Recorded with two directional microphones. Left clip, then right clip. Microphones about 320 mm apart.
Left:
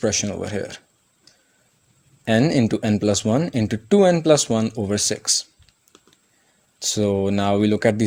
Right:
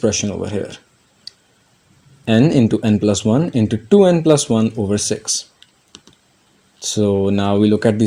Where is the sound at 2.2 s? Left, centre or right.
Left.